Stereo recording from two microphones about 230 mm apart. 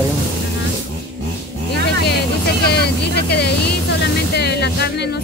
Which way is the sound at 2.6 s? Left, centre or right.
Left.